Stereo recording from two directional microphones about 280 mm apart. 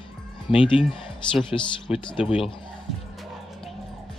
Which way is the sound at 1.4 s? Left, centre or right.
Centre.